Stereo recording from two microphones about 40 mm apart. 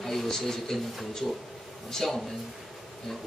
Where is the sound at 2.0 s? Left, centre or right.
Centre.